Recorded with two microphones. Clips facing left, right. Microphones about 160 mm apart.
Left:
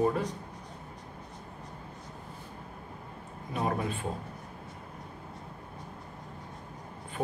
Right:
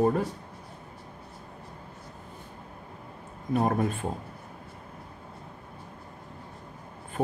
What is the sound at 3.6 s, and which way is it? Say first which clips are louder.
Speech: right 5 dB; 50° right (ahead or behind).